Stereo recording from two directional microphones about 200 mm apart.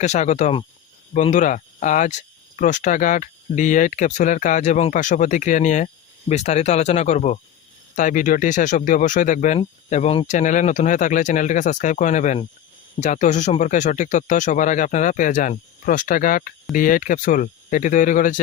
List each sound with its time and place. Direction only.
0.0 s cricket: 35° left (ahead or behind)